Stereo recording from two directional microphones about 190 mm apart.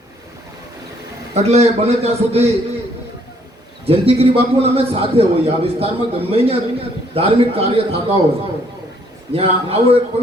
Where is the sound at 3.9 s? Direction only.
30° right (ahead or behind).